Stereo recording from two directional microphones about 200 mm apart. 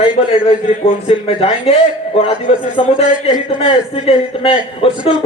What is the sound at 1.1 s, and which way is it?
A man's voice, 30° left (ahead or behind).